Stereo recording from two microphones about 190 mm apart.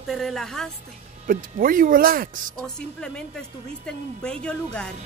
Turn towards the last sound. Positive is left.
turn(degrees=5)  # may be behind; listen again after turning